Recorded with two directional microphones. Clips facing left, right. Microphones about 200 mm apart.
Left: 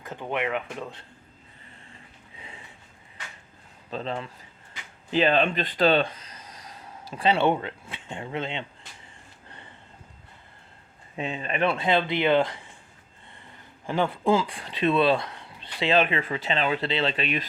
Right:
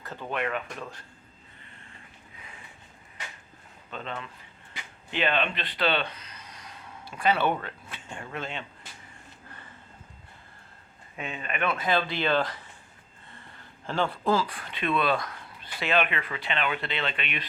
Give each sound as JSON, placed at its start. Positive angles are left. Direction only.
{"t": 0.0, "sound": "speech", "side_deg": 20}
{"t": 3.8, "sound": "speech", "side_deg": 35}
{"t": 11.2, "sound": "speech", "side_deg": 30}
{"t": 13.8, "sound": "speech", "side_deg": 15}